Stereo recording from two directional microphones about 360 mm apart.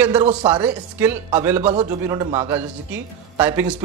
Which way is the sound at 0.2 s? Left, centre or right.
Centre.